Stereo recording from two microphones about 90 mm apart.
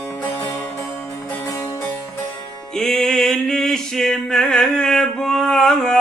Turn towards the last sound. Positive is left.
turn(degrees=5)  # may be behind; listen again after turning